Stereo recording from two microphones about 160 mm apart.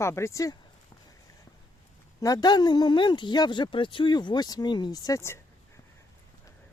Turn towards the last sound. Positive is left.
turn(degrees=20)  # may be behind; listen again after turning